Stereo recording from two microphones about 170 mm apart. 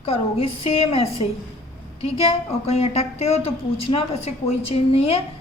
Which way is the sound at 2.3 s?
35° left (ahead or behind).